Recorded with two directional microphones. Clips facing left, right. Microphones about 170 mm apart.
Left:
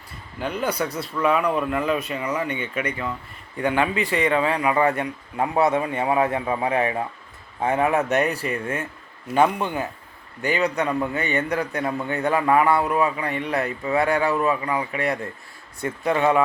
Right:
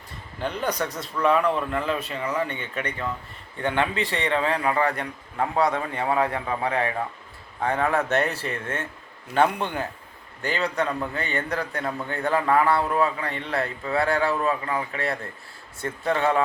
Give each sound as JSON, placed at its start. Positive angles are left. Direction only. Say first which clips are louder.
{"t": 0.3, "sound": "a man's voice", "louder": "left 2 dB", "side_deg": 5}
{"t": 4.7, "sound": "a man's voice", "louder": "left 4 dB", "side_deg": 20}